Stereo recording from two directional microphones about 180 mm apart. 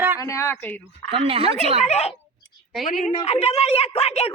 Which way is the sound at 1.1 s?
30° right (ahead or behind).